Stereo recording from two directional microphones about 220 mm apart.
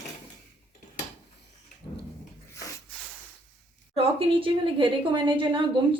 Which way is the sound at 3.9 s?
25° right (ahead or behind).